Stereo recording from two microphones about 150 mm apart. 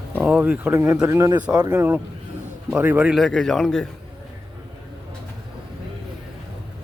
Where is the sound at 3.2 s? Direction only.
5° left (ahead or behind).